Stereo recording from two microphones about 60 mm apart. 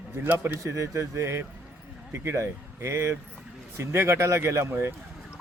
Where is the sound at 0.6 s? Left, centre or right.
Right.